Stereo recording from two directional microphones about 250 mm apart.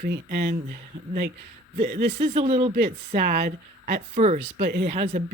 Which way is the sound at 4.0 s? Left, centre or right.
Right.